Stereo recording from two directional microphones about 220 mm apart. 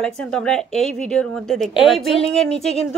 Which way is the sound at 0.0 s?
5° left (ahead or behind).